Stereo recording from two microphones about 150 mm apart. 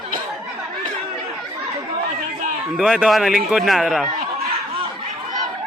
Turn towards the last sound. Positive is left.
turn(degrees=0)  # may be behind; listen again after turning